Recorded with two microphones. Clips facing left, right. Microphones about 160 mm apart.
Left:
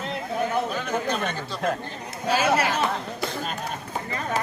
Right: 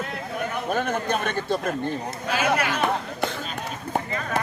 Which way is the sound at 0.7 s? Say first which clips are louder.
Right 2 dB; 55° right (ahead or behind).